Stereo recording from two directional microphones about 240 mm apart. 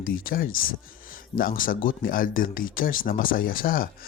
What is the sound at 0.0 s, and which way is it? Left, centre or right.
Speech, left.